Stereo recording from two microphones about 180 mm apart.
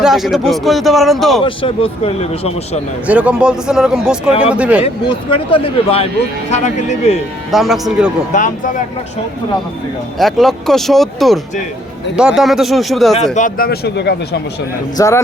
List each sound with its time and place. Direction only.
0.0 s speech: centre (ahead or behind)
1.5 s speech: 30° left (ahead or behind)
3.1 s speech: 5° right (ahead or behind)
4.8 s a man's voice: 30° left (ahead or behind)
7.5 s speech: centre (ahead or behind)
8.3 s speech: 45° left (ahead or behind)
10.2 s speech: centre (ahead or behind)
13.3 s speech: 45° left (ahead or behind)
13.7 s speech: 70° left (ahead or behind)
14.9 s speech: 15° left (ahead or behind)